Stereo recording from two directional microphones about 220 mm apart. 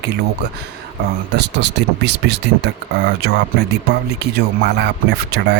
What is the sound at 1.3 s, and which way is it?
Speech, 50° right (ahead or behind).